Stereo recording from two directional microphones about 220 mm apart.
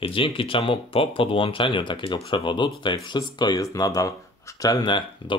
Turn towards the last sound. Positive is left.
turn(degrees=20)  # may be behind; listen again after turning